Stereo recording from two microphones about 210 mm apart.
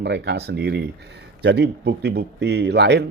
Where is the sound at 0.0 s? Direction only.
55° right (ahead or behind).